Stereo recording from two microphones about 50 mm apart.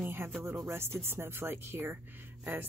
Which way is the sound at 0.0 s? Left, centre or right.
Right.